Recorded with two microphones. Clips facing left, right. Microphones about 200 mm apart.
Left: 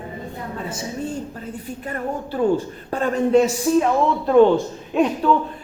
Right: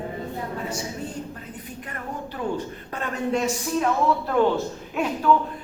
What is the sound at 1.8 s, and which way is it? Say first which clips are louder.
Speech: left 8 dB; 30° left (ahead or behind).